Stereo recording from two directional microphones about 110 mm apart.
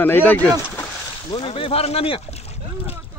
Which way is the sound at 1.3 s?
60° left (ahead or behind).